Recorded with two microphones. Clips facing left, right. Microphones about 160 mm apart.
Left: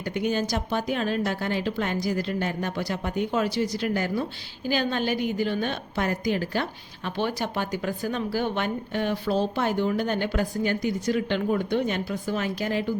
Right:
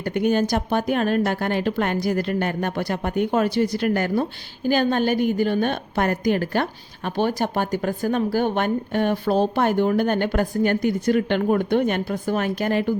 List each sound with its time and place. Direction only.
0.0 s a woman's voice: 55° right (ahead or behind)